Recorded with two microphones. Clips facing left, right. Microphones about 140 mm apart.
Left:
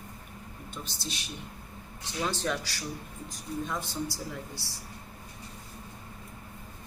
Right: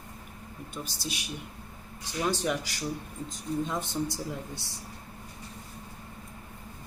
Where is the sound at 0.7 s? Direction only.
10° right (ahead or behind).